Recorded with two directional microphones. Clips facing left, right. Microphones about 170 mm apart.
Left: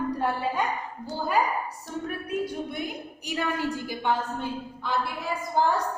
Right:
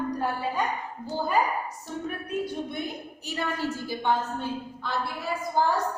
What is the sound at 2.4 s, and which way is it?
A woman's voice, 10° left (ahead or behind).